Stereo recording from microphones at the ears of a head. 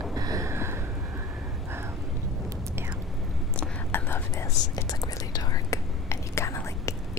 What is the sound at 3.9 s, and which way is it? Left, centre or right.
Whispering, left.